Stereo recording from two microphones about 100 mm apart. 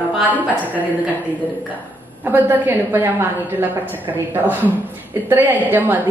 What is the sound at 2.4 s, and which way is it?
A woman's voice, 20° right (ahead or behind).